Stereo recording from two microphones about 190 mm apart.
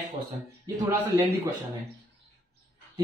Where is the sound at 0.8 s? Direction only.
10° right (ahead or behind).